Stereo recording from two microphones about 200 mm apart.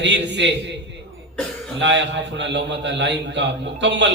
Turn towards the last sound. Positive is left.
turn(degrees=-60)  # may be behind; listen again after turning